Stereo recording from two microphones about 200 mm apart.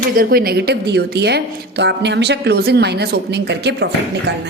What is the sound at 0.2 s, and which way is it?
A woman's voice, 50° right (ahead or behind).